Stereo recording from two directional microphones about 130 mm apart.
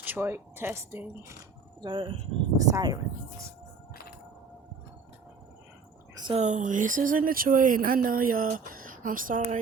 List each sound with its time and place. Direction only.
0.0 s speech: 15° right (ahead or behind)
1.8 s speech: 40° right (ahead or behind)
2.6 s speech: 25° right (ahead or behind)
6.3 s speech: 65° right (ahead or behind)